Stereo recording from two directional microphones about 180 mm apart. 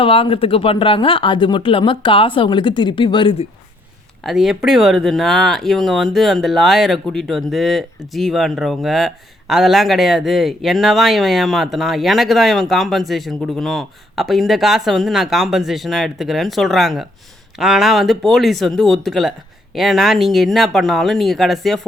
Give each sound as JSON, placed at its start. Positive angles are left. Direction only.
{"t": 0.0, "sound": "speech", "side_deg": 30}
{"t": 4.2, "sound": "speech", "side_deg": 0}